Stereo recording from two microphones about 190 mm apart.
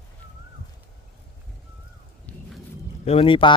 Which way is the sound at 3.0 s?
30° left (ahead or behind).